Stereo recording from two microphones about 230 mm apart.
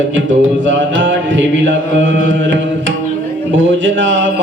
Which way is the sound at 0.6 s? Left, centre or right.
Right.